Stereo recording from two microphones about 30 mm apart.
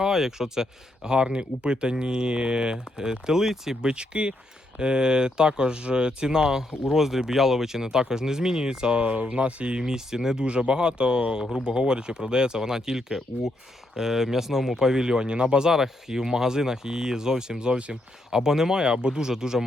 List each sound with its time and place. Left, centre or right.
0.0 s speech: centre
3.9 s speech: right
9.0 s speech: right
9.8 s speech: centre
10.3 s speech: right; by 14.8 s centre
14.8 s speech: centre
15.7 s speech: centre
19.3 s speech: centre